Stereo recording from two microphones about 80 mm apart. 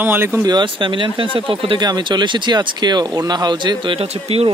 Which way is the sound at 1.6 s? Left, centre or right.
Right.